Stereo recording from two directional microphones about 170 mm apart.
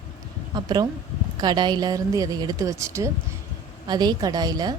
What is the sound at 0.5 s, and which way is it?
A woman's voice, 25° right (ahead or behind).